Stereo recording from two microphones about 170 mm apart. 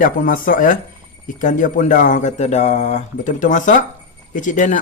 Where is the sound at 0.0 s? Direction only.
55° left (ahead or behind).